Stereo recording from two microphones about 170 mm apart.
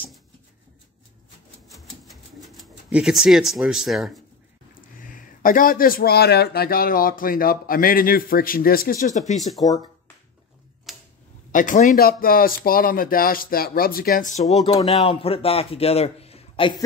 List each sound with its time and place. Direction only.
1.8 s typewriter: centre (ahead or behind)
4.9 s speech: 55° left (ahead or behind)
9.4 s speech: centre (ahead or behind)
10.9 s tick-tock: centre (ahead or behind)
11.5 s speech: 50° left (ahead or behind)
15.0 s a man's voice: 35° left (ahead or behind)